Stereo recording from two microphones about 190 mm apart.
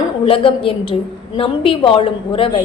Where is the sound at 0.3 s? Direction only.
30° left (ahead or behind).